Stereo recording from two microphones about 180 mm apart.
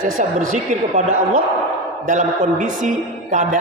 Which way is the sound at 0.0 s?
45° right (ahead or behind).